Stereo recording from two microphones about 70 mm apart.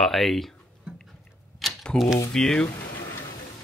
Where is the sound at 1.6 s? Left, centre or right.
Centre.